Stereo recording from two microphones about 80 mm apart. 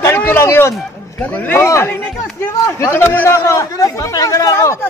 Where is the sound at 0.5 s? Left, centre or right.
Left.